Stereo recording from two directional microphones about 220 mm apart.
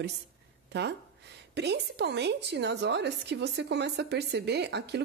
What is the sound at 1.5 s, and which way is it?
A woman's voice, 50° right (ahead or behind).